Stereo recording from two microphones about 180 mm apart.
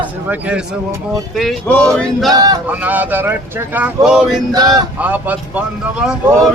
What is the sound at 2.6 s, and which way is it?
Speech, 10° right (ahead or behind).